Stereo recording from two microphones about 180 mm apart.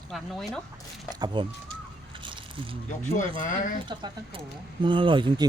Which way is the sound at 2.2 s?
25° right (ahead or behind).